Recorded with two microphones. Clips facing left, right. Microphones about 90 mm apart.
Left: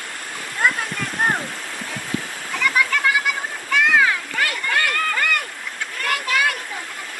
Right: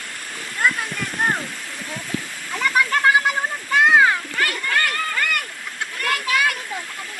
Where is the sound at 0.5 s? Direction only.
20° left (ahead or behind).